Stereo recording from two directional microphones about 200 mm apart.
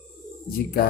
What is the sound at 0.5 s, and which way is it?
Speech, 50° left (ahead or behind).